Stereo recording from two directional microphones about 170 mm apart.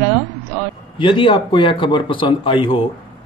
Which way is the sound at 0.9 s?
30° left (ahead or behind).